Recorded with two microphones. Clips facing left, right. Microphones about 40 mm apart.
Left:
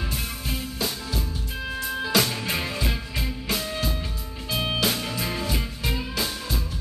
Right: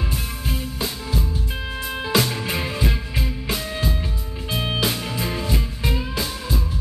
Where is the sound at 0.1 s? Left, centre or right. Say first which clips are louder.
Right 3 dB; centre.